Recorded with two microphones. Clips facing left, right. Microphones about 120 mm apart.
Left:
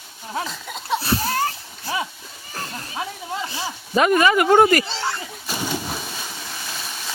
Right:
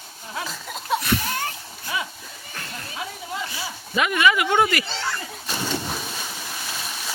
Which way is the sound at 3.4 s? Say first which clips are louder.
Left 4 dB; 35° left (ahead or behind).